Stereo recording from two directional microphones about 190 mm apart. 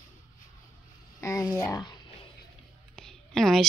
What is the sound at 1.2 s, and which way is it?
Speech, 15° left (ahead or behind).